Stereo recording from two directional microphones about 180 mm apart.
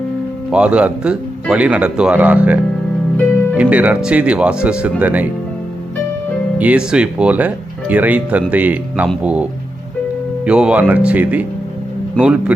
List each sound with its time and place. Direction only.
0.5 s speech: 5° right (ahead or behind)
3.6 s speech: 10° right (ahead or behind)
6.6 s speech: 5° right (ahead or behind)